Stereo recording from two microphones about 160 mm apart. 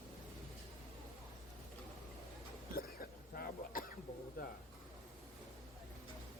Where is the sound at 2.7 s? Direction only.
65° left (ahead or behind).